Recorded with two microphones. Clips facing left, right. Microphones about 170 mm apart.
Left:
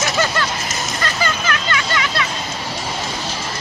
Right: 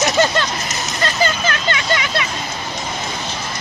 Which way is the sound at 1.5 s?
25° right (ahead or behind).